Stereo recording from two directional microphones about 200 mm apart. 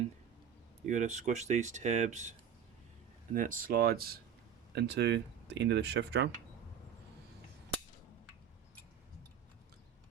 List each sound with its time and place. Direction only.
0.9 s speech: 40° right (ahead or behind)
3.3 s speech: 40° right (ahead or behind); by 6.3 s 60° right (ahead or behind)